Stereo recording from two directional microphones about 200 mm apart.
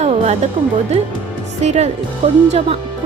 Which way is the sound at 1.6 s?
35° right (ahead or behind).